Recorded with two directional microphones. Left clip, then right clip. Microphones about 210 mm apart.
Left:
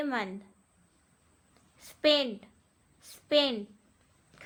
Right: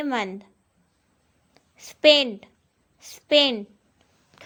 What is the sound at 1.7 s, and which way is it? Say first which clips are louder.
A woman's voice: right 9 dB; 30° right (ahead or behind).